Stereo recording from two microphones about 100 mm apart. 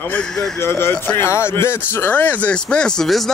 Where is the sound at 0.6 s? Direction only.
25° left (ahead or behind).